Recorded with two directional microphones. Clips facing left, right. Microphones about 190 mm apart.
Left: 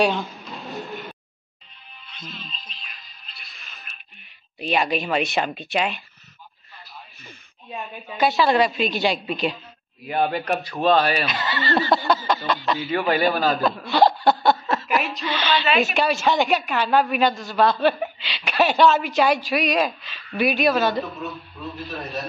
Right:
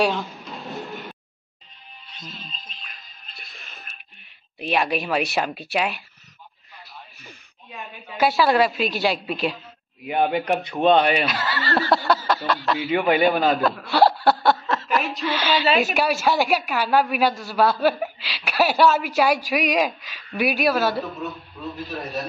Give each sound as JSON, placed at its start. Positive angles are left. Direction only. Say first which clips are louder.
{"t": 0.0, "sound": "a sound", "louder": "left 1 dB", "side_deg": 0}
{"t": 2.0, "sound": "music", "louder": "left 1 dB", "side_deg": -40}
{"t": 4.6, "sound": "speech", "louder": "even", "side_deg": 0}
{"t": 8.2, "sound": "speech", "louder": "even", "side_deg": -5}
{"t": 10.0, "sound": "a man's voice", "louder": "right 1 dB", "side_deg": -15}
{"t": 11.2, "sound": "speech", "louder": "even", "side_deg": -5}
{"t": 12.3, "sound": "chuckle", "louder": "even", "side_deg": 0}
{"t": 12.7, "sound": "a woman's voice", "louder": "right 4 dB", "side_deg": -20}
{"t": 13.6, "sound": "chuckle", "louder": "even", "side_deg": -5}
{"t": 15.0, "sound": "a woman's voice", "louder": "right 1 dB", "side_deg": 0}